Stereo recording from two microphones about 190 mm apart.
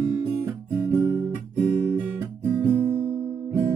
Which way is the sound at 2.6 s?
15° right (ahead or behind).